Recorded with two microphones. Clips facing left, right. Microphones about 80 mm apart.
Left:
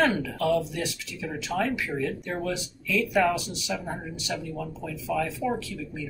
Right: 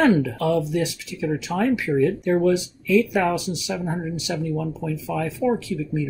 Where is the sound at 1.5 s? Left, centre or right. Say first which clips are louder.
Right 2 dB; right.